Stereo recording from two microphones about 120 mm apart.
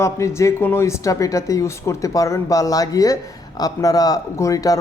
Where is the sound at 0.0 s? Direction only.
25° left (ahead or behind).